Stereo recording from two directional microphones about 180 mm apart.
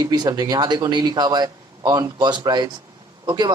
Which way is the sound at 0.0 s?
20° right (ahead or behind).